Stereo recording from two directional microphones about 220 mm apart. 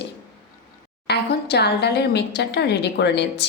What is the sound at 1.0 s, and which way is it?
A woman's voice, 50° left (ahead or behind).